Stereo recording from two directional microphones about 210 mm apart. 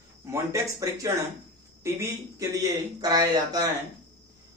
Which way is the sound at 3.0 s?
20° right (ahead or behind).